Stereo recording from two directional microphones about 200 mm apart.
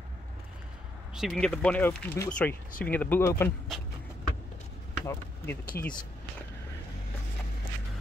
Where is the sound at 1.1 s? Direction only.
Centre (ahead or behind).